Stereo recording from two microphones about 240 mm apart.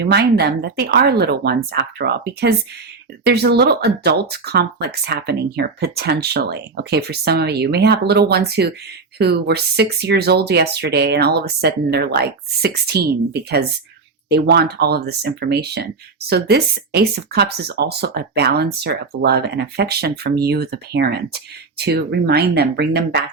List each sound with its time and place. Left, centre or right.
0.0 s speech: right